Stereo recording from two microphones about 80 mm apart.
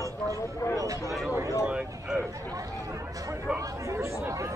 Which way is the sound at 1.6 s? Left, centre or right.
Centre.